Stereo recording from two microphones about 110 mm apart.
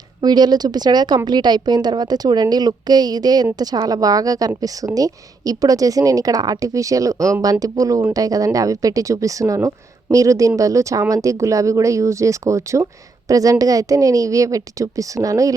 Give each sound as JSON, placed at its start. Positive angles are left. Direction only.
{"t": 0.2, "sound": "a woman's voice", "side_deg": -40}